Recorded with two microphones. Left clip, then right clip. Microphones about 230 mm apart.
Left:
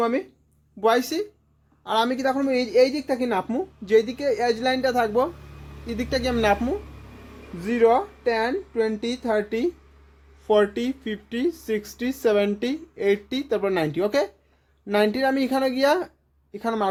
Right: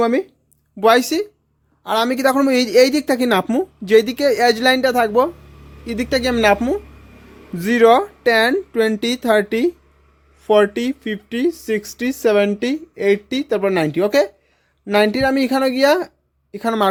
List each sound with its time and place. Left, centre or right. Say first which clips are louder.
0.0 s speech: right 6 dB; right
0.8 s speech: right 7 dB; right